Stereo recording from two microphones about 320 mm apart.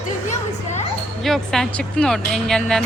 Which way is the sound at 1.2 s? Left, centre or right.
Centre.